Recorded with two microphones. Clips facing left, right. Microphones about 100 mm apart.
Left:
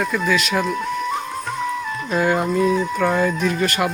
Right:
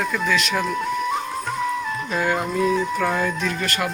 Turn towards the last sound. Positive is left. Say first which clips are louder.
# left 5 dB
turn(degrees=15)  # may be behind; listen again after turning